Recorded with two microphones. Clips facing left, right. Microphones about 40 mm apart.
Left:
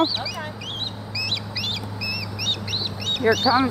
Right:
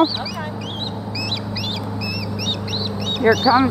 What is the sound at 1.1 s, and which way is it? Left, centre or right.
Chicken, centre.